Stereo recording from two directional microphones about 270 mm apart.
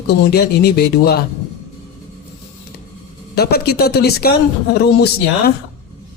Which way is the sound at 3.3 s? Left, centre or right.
Left.